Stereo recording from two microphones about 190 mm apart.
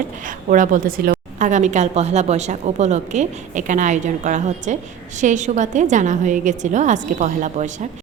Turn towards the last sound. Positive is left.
turn(degrees=-40)  # may be behind; listen again after turning